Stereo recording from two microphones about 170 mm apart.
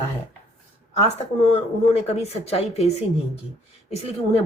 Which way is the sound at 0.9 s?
40° left (ahead or behind).